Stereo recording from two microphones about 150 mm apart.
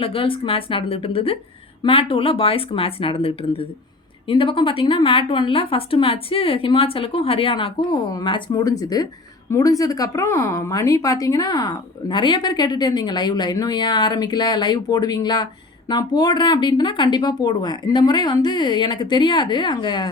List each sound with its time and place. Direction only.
0.0 s a woman's voice: 35° left (ahead or behind)